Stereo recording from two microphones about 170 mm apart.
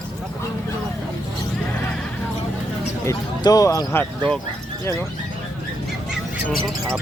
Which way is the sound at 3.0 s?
20° left (ahead or behind).